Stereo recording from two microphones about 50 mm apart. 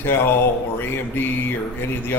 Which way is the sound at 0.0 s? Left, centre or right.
Left.